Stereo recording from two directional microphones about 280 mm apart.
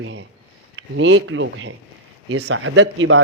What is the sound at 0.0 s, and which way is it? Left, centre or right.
A man's voice, right.